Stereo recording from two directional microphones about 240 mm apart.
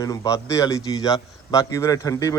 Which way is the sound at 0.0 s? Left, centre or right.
Centre.